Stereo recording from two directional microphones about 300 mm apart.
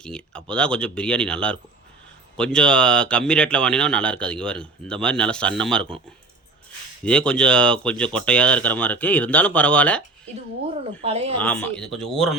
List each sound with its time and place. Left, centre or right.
0.0 s speech: centre
7.0 s speech: centre
11.0 s speech: centre
11.3 s speech: centre